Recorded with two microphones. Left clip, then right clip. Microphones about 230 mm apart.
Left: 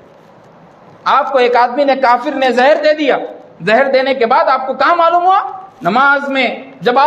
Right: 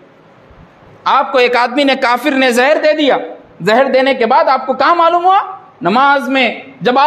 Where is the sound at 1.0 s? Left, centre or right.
Right.